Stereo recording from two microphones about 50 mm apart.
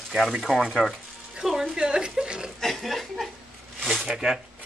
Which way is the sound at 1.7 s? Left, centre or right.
Centre.